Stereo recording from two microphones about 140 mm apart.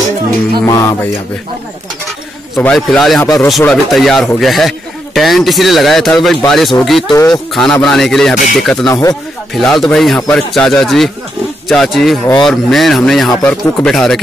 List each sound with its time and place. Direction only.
0.7 s music: 25° left (ahead or behind)
2.6 s a man's voice: 5° left (ahead or behind)